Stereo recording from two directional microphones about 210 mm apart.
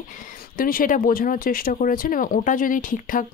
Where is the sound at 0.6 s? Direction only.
40° left (ahead or behind).